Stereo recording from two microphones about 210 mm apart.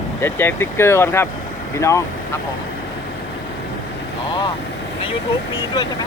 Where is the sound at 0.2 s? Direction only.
10° left (ahead or behind).